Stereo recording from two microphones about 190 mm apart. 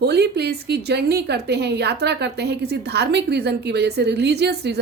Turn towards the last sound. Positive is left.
turn(degrees=-60)  # may be behind; listen again after turning